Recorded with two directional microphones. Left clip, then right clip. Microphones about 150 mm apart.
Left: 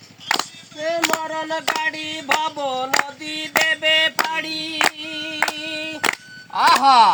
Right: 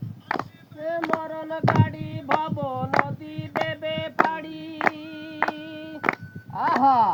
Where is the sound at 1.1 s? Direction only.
15° left (ahead or behind).